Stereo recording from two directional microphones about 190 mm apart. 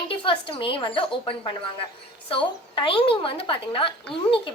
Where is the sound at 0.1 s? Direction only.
25° left (ahead or behind).